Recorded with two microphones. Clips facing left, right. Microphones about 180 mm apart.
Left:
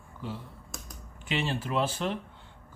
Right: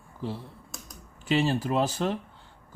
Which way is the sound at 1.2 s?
40° right (ahead or behind).